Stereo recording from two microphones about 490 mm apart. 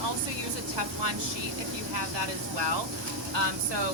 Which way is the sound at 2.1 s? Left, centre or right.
Right.